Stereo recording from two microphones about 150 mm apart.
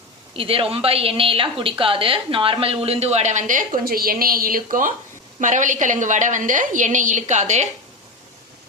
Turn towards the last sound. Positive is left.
turn(degrees=-50)  # may be behind; listen again after turning